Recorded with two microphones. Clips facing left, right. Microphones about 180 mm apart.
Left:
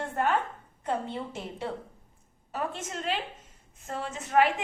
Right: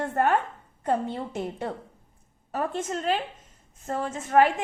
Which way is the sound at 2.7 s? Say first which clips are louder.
Right 6 dB; 45° right (ahead or behind).